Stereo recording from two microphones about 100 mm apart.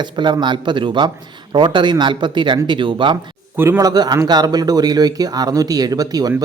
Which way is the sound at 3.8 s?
40° right (ahead or behind).